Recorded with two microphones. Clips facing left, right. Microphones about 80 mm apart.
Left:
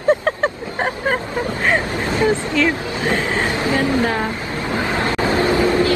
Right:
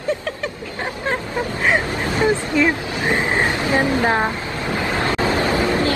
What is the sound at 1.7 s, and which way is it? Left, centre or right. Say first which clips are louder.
Vehicle: even; right.